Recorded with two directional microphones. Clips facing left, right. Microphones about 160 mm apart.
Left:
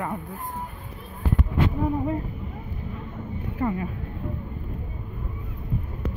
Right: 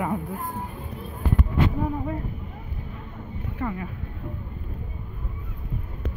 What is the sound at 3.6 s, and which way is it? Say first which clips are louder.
Speech: left 4 dB; 25° left (ahead or behind).